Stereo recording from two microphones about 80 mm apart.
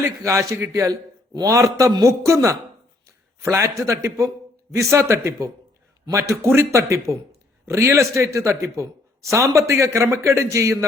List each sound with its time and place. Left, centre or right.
0.0 s speech: right